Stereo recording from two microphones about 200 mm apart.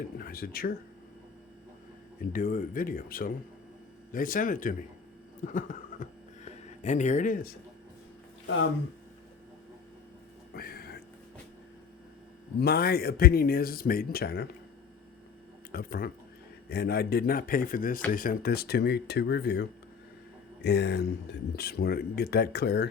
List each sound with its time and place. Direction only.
0.2 s speech: 45° left (ahead or behind)
2.3 s speech: 45° left (ahead or behind)
5.4 s a sound: 40° left (ahead or behind)
10.5 s a sound: 50° left (ahead or behind)
12.5 s speech: 50° left (ahead or behind)
15.7 s speech: 45° left (ahead or behind)